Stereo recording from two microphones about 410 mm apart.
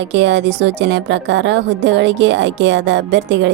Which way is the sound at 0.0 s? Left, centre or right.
Right.